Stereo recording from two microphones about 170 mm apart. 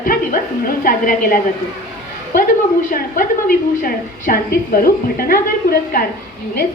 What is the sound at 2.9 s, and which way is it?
A woman's voice, 55° left (ahead or behind).